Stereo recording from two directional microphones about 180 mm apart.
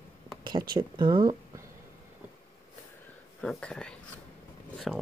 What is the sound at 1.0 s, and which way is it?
Speech, 25° right (ahead or behind).